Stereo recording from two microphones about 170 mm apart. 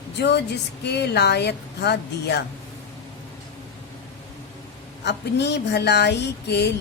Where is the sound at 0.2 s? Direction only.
80° left.